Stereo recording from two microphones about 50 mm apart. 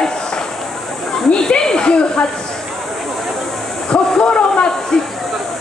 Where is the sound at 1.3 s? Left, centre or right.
Centre.